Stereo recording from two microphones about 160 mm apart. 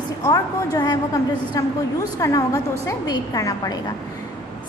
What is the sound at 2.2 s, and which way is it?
A woman's voice, 20° left (ahead or behind).